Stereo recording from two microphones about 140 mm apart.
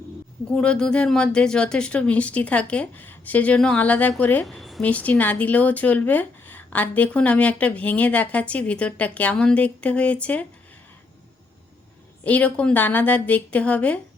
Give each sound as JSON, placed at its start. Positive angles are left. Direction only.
{"t": 0.4, "sound": "speech", "side_deg": 10}
{"t": 4.4, "sound": "speech", "side_deg": 0}
{"t": 12.2, "sound": "speech", "side_deg": 10}